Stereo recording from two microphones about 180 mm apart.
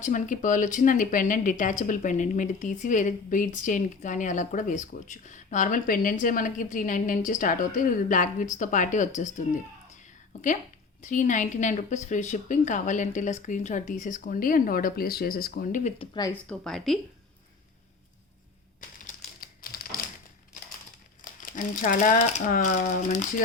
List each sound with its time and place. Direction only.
0.0 s speech: 45° left (ahead or behind)
11.0 s speech: 45° left (ahead or behind)
16.0 s speech: 25° left (ahead or behind)
16.5 s a woman's voice: centre (ahead or behind)
18.8 s crumpling: 50° left (ahead or behind)
21.4 s speech: 45° left (ahead or behind)